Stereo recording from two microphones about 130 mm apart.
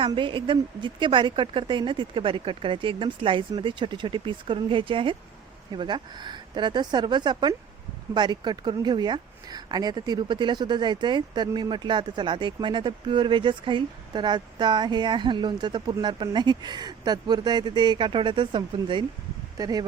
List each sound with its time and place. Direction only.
0.0 s speech: 40° right (ahead or behind)